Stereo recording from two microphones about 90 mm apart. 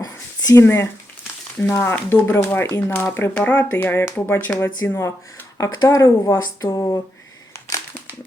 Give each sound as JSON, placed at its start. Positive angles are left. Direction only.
{"t": 0.0, "sound": "a sound", "side_deg": 40}
{"t": 0.6, "sound": "speech", "side_deg": 30}
{"t": 5.5, "sound": "speech", "side_deg": 45}